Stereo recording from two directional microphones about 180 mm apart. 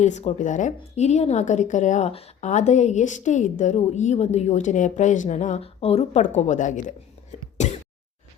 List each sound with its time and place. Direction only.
0.0 s a woman's voice: 40° left (ahead or behind)